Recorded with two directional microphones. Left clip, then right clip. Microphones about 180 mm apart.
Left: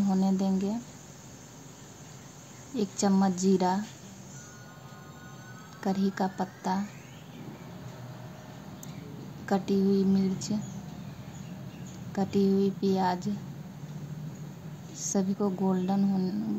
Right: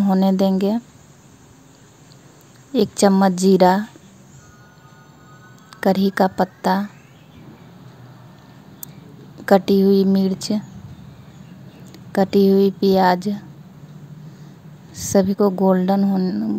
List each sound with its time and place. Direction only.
0.0 s a woman's voice: 50° right (ahead or behind)
2.7 s a woman's voice: 55° right (ahead or behind)
5.8 s a woman's voice: 55° right (ahead or behind)
9.5 s a woman's voice: 55° right (ahead or behind)
12.1 s a woman's voice: 50° right (ahead or behind)
15.0 s a woman's voice: 50° right (ahead or behind)